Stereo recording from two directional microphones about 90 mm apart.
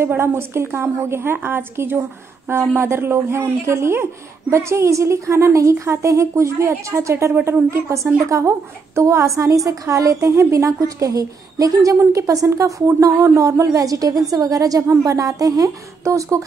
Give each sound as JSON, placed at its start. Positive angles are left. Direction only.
{"t": 0.0, "sound": "a woman's voice", "side_deg": -25}
{"t": 7.3, "sound": "a woman's voice", "side_deg": -20}
{"t": 8.3, "sound": "a woman's voice", "side_deg": -30}